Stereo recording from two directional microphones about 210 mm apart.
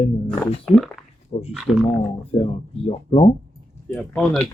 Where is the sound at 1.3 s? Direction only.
25° left (ahead or behind).